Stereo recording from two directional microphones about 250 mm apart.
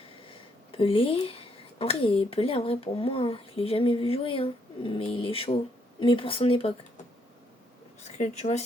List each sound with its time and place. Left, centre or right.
0.0 s speech: left
8.0 s speech: left